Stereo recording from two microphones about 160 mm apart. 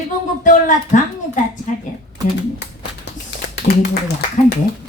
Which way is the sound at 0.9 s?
50° left (ahead or behind).